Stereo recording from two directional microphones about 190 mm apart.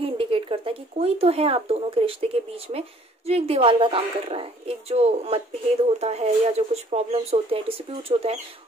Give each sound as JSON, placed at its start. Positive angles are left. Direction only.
{"t": 0.0, "sound": "speech", "side_deg": -30}